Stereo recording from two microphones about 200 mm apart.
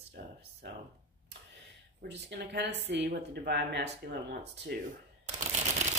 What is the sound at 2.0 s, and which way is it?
Speech, 60° right (ahead or behind).